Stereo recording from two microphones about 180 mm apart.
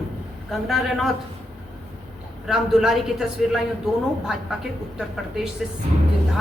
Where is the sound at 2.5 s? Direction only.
Centre (ahead or behind).